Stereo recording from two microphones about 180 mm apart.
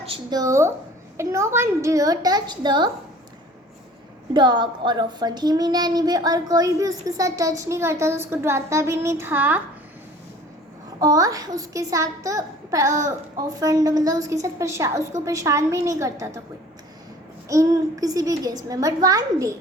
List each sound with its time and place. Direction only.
0.0 s a child's voice: 25° right (ahead or behind)
4.4 s a child's voice: 25° right (ahead or behind)
11.0 s a child's voice: 20° right (ahead or behind)
17.5 s a child's voice: 20° right (ahead or behind)